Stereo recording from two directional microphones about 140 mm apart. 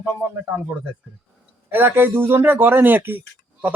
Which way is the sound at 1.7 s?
15° right (ahead or behind).